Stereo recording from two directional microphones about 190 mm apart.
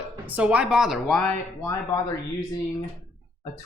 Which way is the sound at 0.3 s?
5° right (ahead or behind).